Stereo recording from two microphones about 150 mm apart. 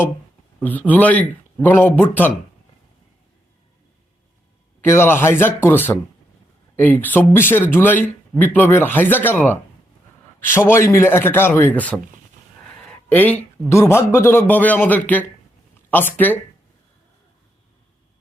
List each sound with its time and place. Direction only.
0.6 s speech: 10° left (ahead or behind)
4.8 s speech: 15° left (ahead or behind)